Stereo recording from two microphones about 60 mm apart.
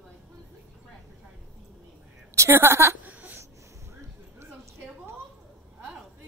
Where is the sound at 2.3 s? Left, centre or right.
Right.